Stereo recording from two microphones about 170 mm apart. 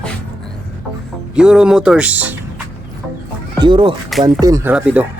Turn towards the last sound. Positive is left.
turn(degrees=-5)  # may be behind; listen again after turning